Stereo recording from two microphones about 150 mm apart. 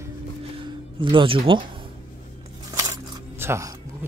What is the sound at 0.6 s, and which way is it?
Speech, 35° right (ahead or behind).